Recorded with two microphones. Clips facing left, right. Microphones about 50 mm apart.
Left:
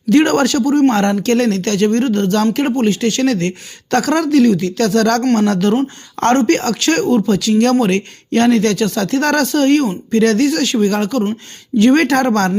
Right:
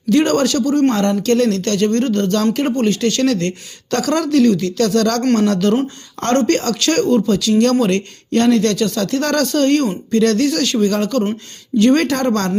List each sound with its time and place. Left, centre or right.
0.1 s speech: left
0.9 s speech: left
2.6 s speech: centre
6.2 s speech: left
6.5 s speech: left
7.3 s speech: left